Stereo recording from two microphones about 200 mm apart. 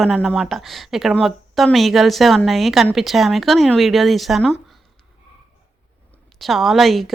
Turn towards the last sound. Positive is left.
turn(degrees=0)  # may be behind; listen again after turning